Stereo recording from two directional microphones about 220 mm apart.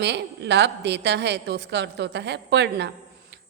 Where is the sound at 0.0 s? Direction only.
50° right (ahead or behind).